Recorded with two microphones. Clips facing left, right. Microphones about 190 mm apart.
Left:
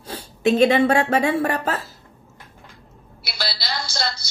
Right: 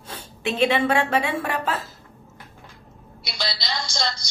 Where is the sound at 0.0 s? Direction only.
40° left (ahead or behind).